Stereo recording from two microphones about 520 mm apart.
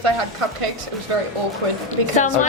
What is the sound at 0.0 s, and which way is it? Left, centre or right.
Speech, right.